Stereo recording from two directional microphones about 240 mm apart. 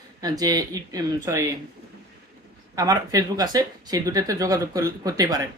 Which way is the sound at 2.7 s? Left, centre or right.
Centre.